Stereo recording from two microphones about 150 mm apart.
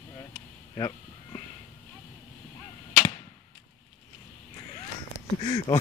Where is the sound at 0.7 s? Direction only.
20° left (ahead or behind).